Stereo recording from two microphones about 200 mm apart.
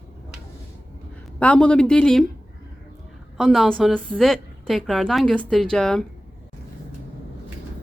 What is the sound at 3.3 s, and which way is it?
A woman's voice, centre (ahead or behind).